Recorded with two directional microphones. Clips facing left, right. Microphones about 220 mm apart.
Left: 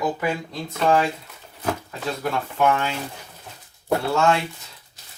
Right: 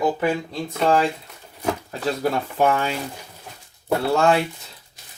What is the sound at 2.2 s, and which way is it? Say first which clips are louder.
Speech: right 1 dB; 35° right (ahead or behind).